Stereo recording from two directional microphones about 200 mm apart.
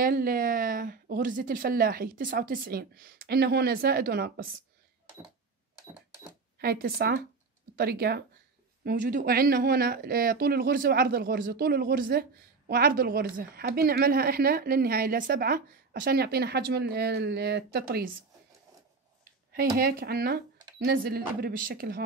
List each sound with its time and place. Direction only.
0.0 s speech: 45° right (ahead or behind)
6.6 s speech: 50° right (ahead or behind)
8.8 s speech: 40° right (ahead or behind)
19.5 s speech: 50° right (ahead or behind)